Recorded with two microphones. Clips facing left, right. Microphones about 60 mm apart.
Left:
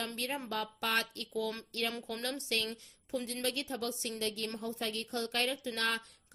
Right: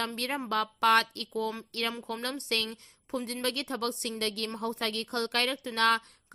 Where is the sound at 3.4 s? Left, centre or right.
Right.